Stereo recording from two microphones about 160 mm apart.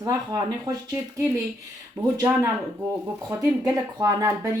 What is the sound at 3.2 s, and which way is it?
Speech, 20° right (ahead or behind).